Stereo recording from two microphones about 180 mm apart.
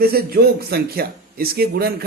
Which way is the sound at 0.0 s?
60° right (ahead or behind).